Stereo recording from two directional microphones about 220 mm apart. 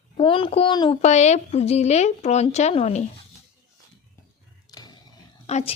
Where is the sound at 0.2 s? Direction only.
25° left (ahead or behind).